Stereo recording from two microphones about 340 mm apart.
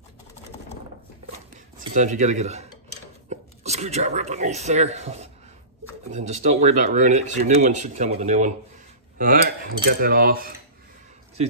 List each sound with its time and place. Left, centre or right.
2.0 s speech: right